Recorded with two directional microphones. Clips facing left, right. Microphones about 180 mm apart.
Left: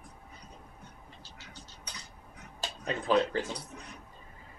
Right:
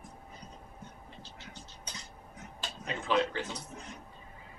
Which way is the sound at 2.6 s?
40° left (ahead or behind).